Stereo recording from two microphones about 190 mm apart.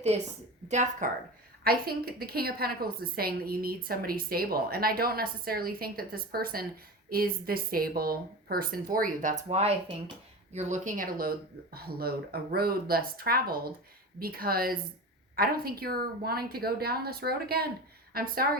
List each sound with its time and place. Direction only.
0.7 s speech: 40° right (ahead or behind)
1.6 s a woman's voice: 50° right (ahead or behind)